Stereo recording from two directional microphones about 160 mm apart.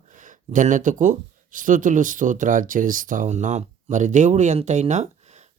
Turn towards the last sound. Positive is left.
turn(degrees=-45)  # may be behind; listen again after turning